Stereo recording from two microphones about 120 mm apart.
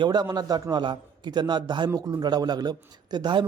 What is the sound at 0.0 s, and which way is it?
Speech, 35° right (ahead or behind).